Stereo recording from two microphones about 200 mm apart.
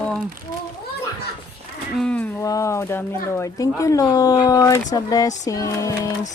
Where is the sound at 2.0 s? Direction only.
5° left (ahead or behind).